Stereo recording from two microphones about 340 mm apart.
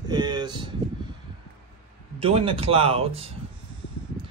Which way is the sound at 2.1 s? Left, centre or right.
Centre.